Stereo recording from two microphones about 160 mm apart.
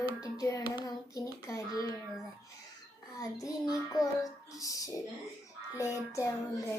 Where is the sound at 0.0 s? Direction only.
20° left (ahead or behind).